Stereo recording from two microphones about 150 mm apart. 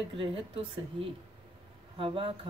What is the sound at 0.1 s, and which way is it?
Speech, 40° right (ahead or behind).